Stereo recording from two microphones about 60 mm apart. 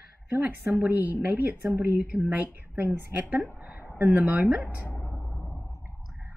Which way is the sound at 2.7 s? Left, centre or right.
Right.